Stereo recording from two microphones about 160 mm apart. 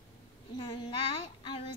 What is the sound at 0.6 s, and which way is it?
Speech, 30° left (ahead or behind).